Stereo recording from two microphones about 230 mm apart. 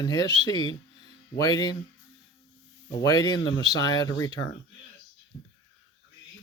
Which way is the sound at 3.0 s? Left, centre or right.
Centre.